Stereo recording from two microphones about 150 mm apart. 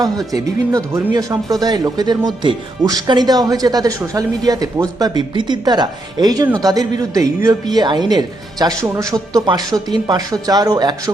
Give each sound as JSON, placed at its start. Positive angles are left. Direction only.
{"t": 0.0, "sound": "speech", "side_deg": -25}